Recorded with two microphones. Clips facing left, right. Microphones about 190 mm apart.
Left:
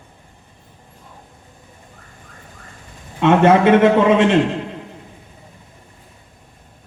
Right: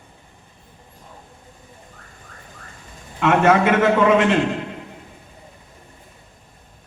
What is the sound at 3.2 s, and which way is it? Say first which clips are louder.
A man's voice: left 3 dB; 25° left (ahead or behind).